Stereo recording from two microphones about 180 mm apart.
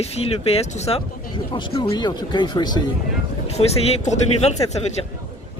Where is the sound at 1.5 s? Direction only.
25° left (ahead or behind).